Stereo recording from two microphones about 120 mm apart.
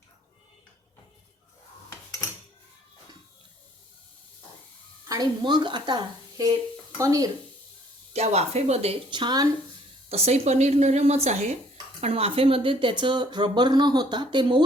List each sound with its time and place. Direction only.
1.9 s cutlery: 30° left (ahead or behind)
5.0 s speech: 30° right (ahead or behind)
8.1 s a woman's voice: 65° right (ahead or behind)
9.0 s speech: 40° right (ahead or behind)
10.1 s speech: 60° right (ahead or behind)
11.9 s speech: 55° right (ahead or behind)